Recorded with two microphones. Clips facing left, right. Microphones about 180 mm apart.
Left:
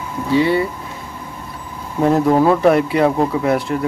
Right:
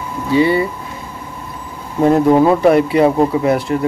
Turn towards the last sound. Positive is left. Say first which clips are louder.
# right 2 dB
turn(degrees=0)  # may be behind; listen again after turning